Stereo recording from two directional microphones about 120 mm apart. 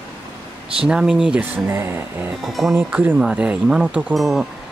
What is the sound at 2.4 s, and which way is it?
Speech, centre (ahead or behind).